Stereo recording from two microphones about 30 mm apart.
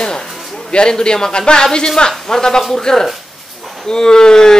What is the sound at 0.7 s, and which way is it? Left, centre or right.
Speech, left.